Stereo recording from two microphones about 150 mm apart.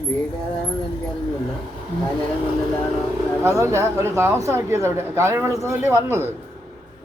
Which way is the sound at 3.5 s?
20° right (ahead or behind).